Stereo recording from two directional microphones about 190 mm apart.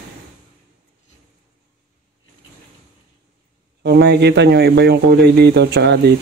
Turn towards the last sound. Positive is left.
turn(degrees=-60)  # may be behind; listen again after turning